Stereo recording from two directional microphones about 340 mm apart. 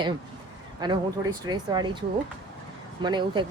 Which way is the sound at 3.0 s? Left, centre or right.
Centre.